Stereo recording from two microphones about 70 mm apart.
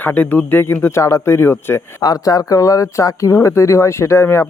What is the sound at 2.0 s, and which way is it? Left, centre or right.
Speech, left.